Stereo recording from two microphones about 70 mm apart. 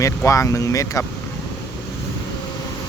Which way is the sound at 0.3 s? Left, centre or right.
Left.